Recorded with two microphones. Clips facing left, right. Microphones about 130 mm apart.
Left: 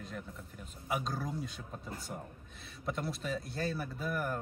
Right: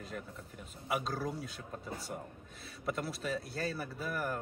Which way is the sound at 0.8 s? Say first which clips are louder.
Right 1 dB; centre (ahead or behind).